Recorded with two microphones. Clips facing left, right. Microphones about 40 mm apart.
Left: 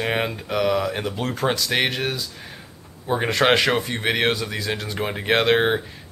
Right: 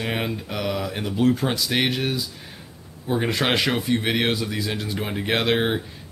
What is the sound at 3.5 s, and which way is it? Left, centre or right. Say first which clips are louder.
Speech: left 3 dB; left.